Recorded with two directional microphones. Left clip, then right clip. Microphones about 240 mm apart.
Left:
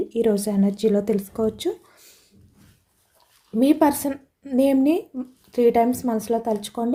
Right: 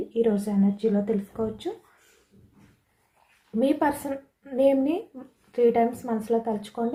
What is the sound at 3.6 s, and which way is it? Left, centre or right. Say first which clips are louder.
A woman's voice: left 5 dB; left.